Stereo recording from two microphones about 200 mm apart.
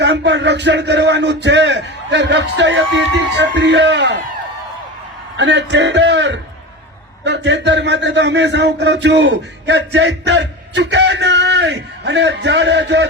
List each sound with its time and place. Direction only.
0.0 s a man's voice: 60° right (ahead or behind)
5.4 s a man's voice: 60° right (ahead or behind)